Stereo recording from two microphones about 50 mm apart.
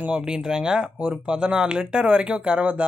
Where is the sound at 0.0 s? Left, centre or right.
Right.